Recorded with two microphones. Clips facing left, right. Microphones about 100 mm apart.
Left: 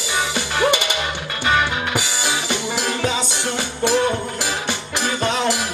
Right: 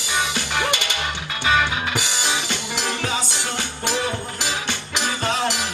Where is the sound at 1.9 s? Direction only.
15° left (ahead or behind).